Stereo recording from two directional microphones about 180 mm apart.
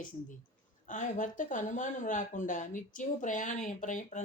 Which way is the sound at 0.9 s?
45° left (ahead or behind).